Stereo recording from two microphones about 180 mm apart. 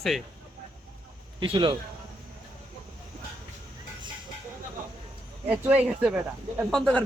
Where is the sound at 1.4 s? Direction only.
30° right (ahead or behind).